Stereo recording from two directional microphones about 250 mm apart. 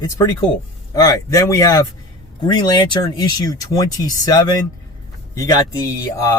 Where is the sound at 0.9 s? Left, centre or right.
Centre.